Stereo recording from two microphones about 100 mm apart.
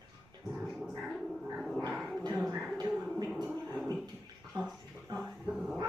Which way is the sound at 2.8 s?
40° right (ahead or behind).